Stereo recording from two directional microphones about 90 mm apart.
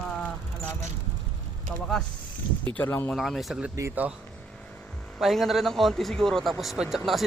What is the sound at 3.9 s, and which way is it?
Speech, 15° right (ahead or behind).